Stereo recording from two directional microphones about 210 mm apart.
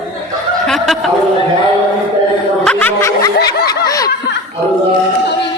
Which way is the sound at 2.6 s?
10° left (ahead or behind).